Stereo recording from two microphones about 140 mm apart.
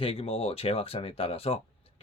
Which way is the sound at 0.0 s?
45° left (ahead or behind).